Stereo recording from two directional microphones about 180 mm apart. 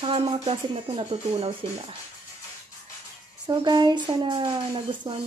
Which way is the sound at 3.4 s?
25° right (ahead or behind).